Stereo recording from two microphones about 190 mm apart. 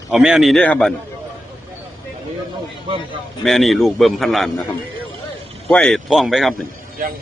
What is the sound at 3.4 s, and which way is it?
A man's voice, centre (ahead or behind).